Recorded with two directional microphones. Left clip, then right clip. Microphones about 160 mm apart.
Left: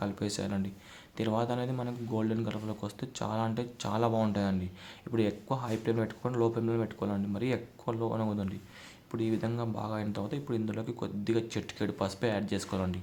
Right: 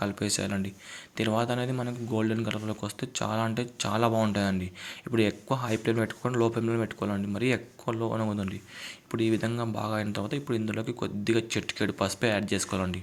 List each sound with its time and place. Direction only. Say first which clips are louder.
0.0 s speech: right 5 dB; 15° right (ahead or behind)